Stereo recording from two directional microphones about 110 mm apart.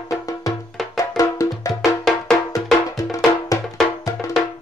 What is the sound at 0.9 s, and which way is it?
Music, 35° left (ahead or behind).